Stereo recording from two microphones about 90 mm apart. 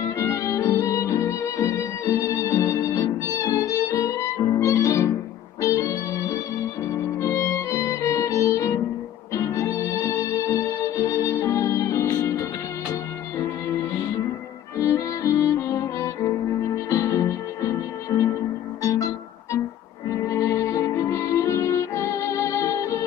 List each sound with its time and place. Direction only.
0.0 s violin: 35° left (ahead or behind)
5.6 s music: 35° left (ahead or behind)